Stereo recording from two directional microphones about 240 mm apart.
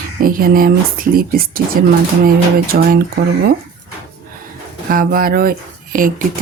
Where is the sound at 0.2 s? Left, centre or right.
Right.